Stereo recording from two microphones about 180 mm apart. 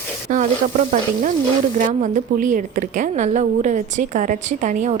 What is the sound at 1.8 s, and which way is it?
A woman's voice, 45° right (ahead or behind).